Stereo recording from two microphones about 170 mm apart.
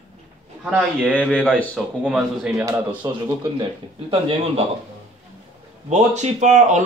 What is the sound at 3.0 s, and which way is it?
Speech, 20° right (ahead or behind).